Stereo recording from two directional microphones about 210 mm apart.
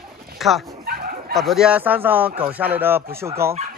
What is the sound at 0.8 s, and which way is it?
Dog, 45° right (ahead or behind).